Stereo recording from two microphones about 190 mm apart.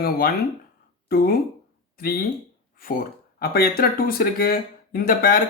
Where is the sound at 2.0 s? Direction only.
50° left (ahead or behind).